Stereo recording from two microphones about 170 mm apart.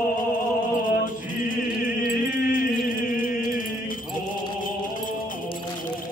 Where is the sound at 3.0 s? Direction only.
55° left (ahead or behind).